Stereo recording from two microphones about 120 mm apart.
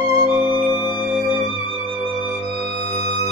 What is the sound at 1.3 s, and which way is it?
Music, 40° right (ahead or behind).